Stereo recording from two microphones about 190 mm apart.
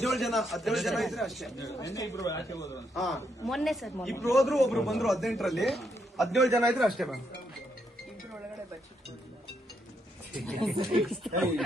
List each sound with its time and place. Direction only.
0.0 s speech: centre (ahead or behind)
1.6 s speech: 20° left (ahead or behind)
2.9 s speech: centre (ahead or behind)
10.4 s speech: centre (ahead or behind)